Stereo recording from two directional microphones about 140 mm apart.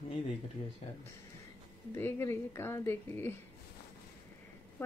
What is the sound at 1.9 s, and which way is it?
Speech, 20° left (ahead or behind).